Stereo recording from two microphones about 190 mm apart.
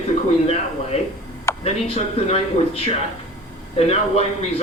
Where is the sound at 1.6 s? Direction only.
35° left (ahead or behind).